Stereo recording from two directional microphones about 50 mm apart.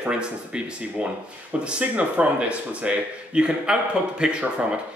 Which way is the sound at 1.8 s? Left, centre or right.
Right.